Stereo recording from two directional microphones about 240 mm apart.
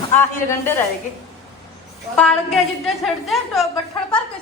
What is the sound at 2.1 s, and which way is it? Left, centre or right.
A woman's voice, centre.